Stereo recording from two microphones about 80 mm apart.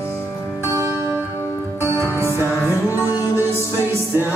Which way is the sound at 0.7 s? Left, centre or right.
Right.